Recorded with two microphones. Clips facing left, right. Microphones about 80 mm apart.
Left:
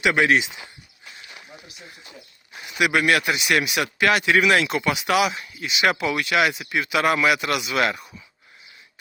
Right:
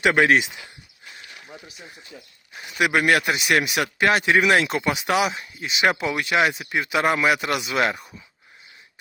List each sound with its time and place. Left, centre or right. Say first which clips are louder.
0.0 s a man's voice: right 1 dB; right
2.6 s a man's voice: even; right
4.0 s a man's voice: even; right